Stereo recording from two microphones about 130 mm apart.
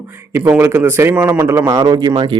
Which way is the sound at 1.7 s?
30° right (ahead or behind).